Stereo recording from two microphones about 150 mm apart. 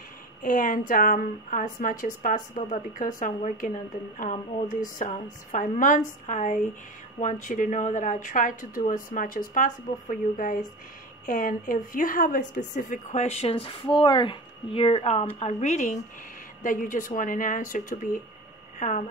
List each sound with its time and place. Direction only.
0.4 s a woman's voice: 65° left (ahead or behind)